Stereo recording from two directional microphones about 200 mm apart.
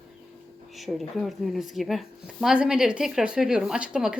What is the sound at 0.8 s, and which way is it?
A woman's voice, centre (ahead or behind).